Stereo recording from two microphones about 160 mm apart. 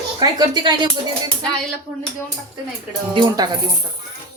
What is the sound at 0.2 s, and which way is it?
Speech, 25° right (ahead or behind).